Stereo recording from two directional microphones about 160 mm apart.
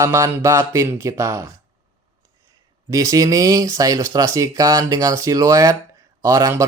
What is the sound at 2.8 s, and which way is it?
Speech, 20° right (ahead or behind).